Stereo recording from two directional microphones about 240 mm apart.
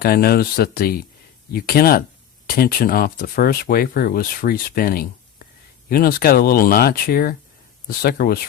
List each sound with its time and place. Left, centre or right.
0.0 s speech: left